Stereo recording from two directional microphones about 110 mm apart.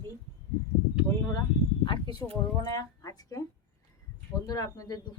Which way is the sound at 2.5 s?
35° left (ahead or behind).